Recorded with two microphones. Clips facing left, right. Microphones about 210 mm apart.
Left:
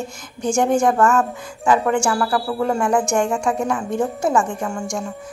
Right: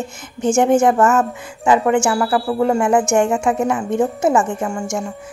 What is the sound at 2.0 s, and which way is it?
Speech, 5° right (ahead or behind).